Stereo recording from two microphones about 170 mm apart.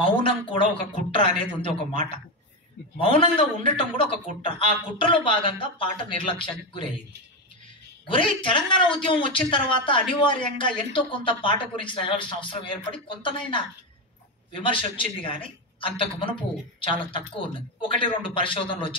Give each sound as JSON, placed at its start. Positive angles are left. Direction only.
{"t": 0.0, "sound": "speech", "side_deg": 30}
{"t": 3.0, "sound": "speech", "side_deg": 30}
{"t": 8.1, "sound": "speech", "side_deg": 30}